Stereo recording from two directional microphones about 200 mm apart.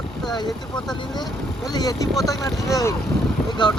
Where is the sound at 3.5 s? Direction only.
25° left (ahead or behind).